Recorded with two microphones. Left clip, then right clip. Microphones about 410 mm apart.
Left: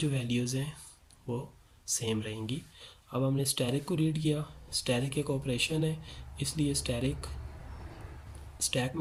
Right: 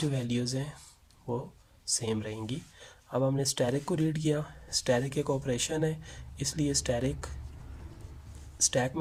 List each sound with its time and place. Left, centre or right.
0.0 s speech: centre
8.5 s speech: centre